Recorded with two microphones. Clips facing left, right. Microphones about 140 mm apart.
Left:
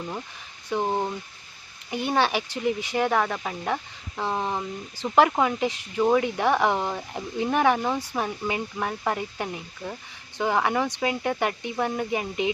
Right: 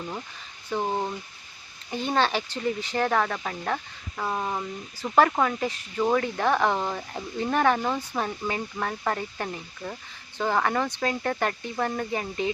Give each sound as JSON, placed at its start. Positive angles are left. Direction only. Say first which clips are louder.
{"t": 0.7, "sound": "speech", "louder": "left 2 dB", "side_deg": 15}
{"t": 4.2, "sound": "speech", "louder": "left 2 dB", "side_deg": 20}